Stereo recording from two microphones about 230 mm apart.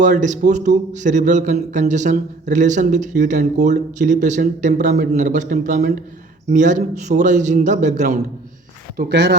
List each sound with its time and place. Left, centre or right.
0.0 s speech: right
9.0 s speech: right